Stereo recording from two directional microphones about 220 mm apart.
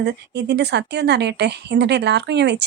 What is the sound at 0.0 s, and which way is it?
A woman's voice, 50° right (ahead or behind).